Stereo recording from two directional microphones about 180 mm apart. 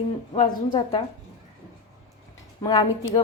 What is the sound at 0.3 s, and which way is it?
Speech, 25° left (ahead or behind).